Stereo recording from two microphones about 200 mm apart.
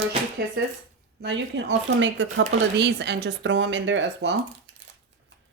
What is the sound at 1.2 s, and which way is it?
Speech, 60° right (ahead or behind).